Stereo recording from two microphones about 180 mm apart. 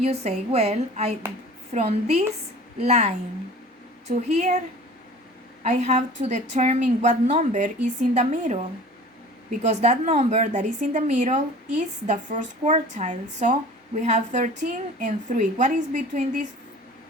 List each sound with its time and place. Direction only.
0.0 s a woman's voice: 35° right (ahead or behind)
4.1 s a woman's voice: 40° right (ahead or behind)
5.6 s a woman's voice: 40° right (ahead or behind)